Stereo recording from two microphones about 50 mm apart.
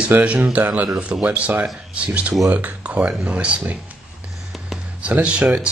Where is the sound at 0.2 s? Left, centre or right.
Right.